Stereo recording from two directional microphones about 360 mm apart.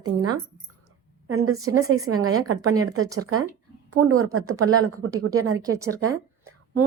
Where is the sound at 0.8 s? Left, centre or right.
Right.